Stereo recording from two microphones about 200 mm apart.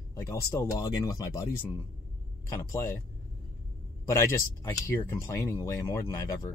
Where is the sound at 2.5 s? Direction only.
15° left (ahead or behind).